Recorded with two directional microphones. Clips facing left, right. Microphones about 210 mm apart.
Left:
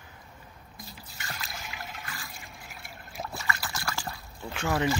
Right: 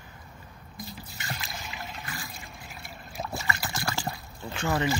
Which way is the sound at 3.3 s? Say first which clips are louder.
Right 3 dB; 25° right (ahead or behind).